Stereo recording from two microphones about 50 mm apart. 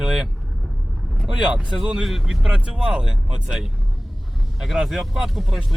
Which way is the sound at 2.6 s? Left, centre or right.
Centre.